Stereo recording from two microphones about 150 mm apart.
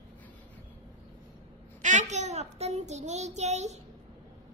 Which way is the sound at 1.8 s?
55° right (ahead or behind).